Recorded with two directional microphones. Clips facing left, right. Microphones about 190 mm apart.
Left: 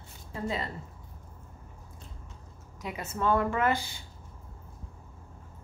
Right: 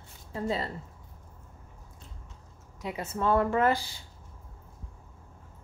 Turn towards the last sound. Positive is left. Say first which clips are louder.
# right 2 dB
turn(degrees=-35)  # may be behind; listen again after turning